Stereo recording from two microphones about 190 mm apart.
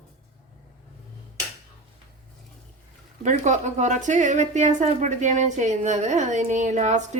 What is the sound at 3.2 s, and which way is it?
A woman's voice, 40° right (ahead or behind).